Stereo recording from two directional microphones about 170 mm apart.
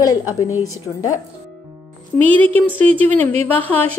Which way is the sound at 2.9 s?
35° right (ahead or behind).